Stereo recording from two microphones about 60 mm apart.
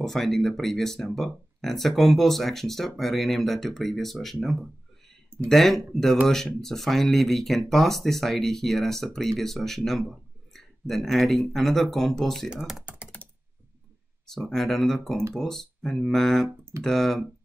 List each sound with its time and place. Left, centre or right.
0.0 s speech: centre
12.4 s speech: centre
13.2 s typing: left
14.2 s speech: centre